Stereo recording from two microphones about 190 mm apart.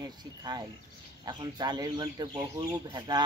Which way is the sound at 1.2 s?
20° right (ahead or behind).